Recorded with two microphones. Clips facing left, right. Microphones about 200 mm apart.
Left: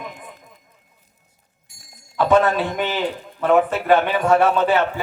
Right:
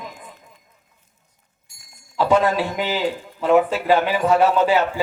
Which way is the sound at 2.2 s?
10° right (ahead or behind).